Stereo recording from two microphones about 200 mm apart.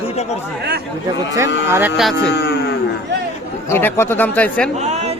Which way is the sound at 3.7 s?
10° left (ahead or behind).